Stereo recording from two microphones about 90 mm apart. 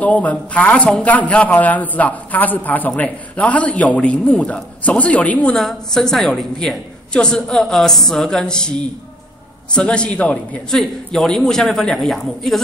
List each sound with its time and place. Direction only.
0.0 s a man's voice: 15° left (ahead or behind)